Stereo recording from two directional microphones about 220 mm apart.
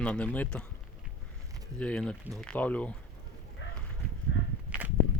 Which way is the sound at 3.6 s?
55° left (ahead or behind).